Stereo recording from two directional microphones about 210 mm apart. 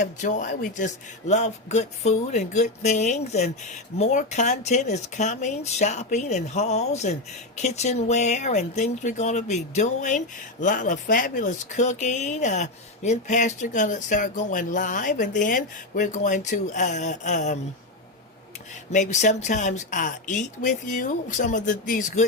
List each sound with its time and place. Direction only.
0.0 s a man's voice: 35° left (ahead or behind)
18.9 s a man's voice: 35° left (ahead or behind)